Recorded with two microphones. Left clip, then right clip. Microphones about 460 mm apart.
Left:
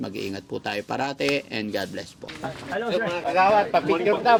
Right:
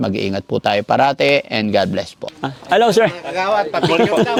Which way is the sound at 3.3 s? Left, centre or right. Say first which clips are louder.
Right 2 dB; right.